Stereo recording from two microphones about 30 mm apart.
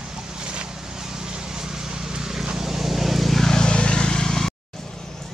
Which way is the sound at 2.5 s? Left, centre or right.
Centre.